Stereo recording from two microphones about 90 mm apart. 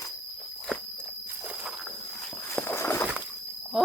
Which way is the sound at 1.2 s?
10° right (ahead or behind).